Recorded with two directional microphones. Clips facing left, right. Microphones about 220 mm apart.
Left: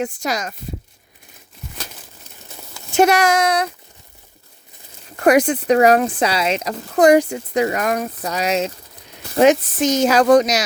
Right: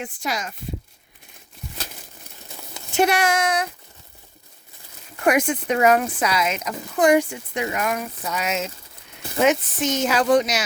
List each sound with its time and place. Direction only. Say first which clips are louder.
0.0 s speech: left 6 dB; 40° left (ahead or behind)
2.9 s speech: left 5 dB; 45° left (ahead or behind)
5.2 s speech: left 6 dB; 35° left (ahead or behind)